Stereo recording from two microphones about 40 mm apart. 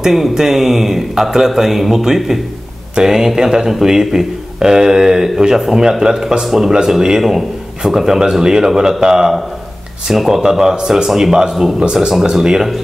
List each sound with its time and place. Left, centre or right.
0.0 s speech: centre
11.8 s speech: centre